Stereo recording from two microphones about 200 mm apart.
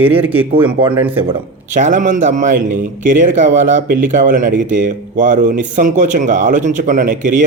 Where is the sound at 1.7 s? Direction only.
40° right (ahead or behind).